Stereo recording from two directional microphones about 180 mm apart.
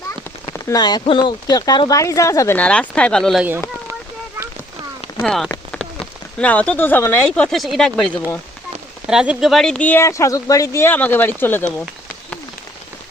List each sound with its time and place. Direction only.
0.5 s speech: 20° left (ahead or behind); by 3.4 s centre (ahead or behind)
5.2 s speech: 5° left (ahead or behind)
9.0 s speech: 5° right (ahead or behind); by 11.7 s 10° left (ahead or behind)